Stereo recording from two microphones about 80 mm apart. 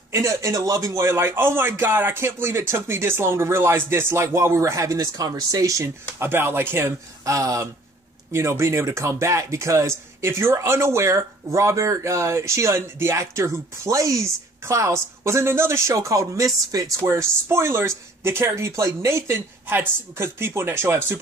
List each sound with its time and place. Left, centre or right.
0.1 s speech: right
1.0 s speech: right
6.1 s speech: right
17.0 s speech: right